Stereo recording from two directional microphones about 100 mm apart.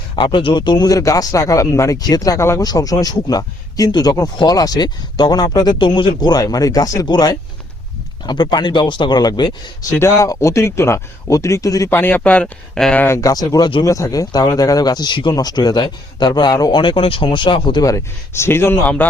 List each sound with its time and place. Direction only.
0.2 s speech: 55° left (ahead or behind)
10.0 s speech: 30° left (ahead or behind)
11.9 s speech: 20° left (ahead or behind)
13.2 s speech: 40° left (ahead or behind)
16.8 s speech: 60° left (ahead or behind)
17.8 s speech: 30° left (ahead or behind)